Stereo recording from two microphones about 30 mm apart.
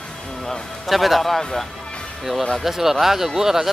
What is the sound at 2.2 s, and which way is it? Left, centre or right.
Speech, centre.